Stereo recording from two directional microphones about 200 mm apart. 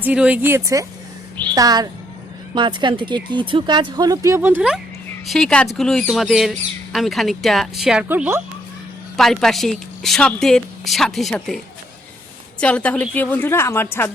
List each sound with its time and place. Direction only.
0.0 s speech: 5° right (ahead or behind)
9.1 s a woman's voice: centre (ahead or behind)